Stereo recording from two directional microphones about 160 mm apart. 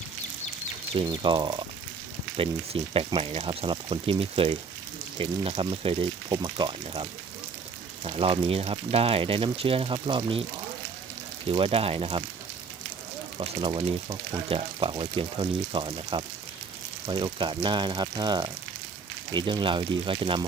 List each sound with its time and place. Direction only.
0.9 s speech: 30° right (ahead or behind)
11.4 s speech: 35° right (ahead or behind)
13.4 s speech: 30° right (ahead or behind)